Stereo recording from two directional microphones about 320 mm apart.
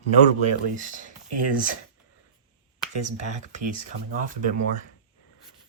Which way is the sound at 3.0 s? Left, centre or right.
Right.